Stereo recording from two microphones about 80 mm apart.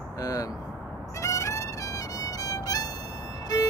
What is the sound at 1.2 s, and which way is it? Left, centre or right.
Music, left.